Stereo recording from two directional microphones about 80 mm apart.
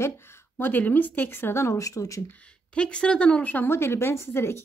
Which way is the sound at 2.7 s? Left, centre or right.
Centre.